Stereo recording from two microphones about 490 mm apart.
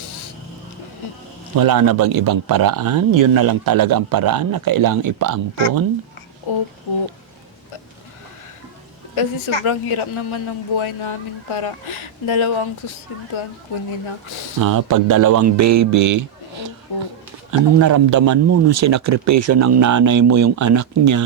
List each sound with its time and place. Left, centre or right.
1.5 s speech: right
6.5 s a man's voice: left
9.1 s a woman's voice: left
14.6 s speech: right
16.9 s speech: left
17.5 s speech: right